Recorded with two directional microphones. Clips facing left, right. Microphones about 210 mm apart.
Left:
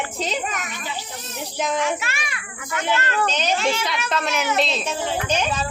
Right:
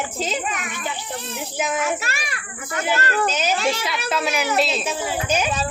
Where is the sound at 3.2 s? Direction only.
5° right (ahead or behind).